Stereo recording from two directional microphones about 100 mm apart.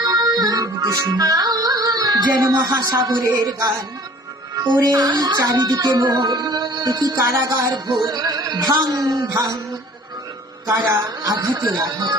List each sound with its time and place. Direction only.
0.0 s music: 35° right (ahead or behind)
2.5 s speech: 35° right (ahead or behind)
4.8 s speech: 45° right (ahead or behind)
10.7 s a woman's voice: 30° right (ahead or behind)